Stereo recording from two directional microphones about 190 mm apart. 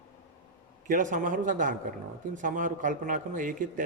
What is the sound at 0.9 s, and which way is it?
A man's voice, 45° right (ahead or behind).